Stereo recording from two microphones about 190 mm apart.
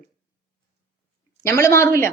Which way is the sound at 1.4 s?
15° left (ahead or behind).